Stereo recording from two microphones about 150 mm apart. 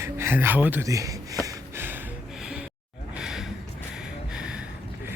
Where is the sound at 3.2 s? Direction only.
5° right (ahead or behind).